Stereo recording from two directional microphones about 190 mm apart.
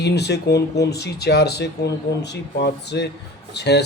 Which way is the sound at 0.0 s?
60° left (ahead or behind).